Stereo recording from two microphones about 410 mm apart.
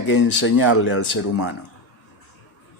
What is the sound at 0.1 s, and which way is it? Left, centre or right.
Speech, left.